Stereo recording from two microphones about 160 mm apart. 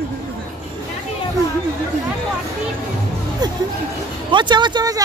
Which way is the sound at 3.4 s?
25° right (ahead or behind).